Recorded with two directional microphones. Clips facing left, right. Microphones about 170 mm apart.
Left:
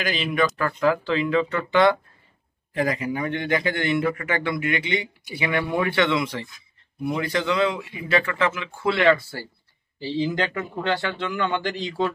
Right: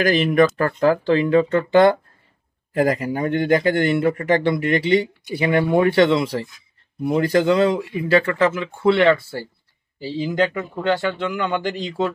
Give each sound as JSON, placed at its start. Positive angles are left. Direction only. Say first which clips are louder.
{"t": 0.0, "sound": "a man's voice", "louder": "right 8 dB", "side_deg": -50}
{"t": 9.9, "sound": "a man's voice", "louder": "right 3 dB", "side_deg": -15}